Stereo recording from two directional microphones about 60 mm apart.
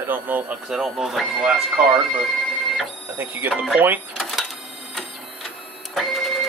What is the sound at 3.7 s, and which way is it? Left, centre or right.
Speech, right.